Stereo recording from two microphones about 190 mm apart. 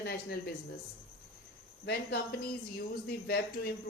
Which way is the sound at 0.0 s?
55° left (ahead or behind).